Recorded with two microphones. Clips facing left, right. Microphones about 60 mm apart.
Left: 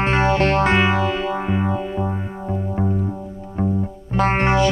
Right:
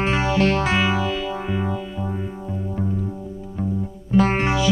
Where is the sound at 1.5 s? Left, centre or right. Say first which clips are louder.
Left 4 dB; left.